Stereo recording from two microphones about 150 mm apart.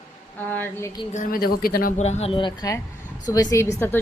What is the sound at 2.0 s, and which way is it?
A woman's voice, 45° left (ahead or behind).